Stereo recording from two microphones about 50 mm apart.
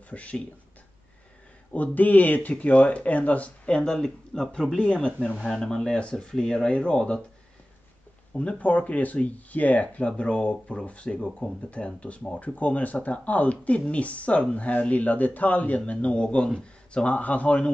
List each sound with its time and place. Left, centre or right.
0.1 s speech: left
1.7 s speech: left
8.3 s speech: left